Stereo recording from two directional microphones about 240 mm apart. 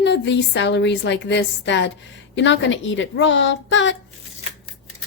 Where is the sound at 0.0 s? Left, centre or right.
Left.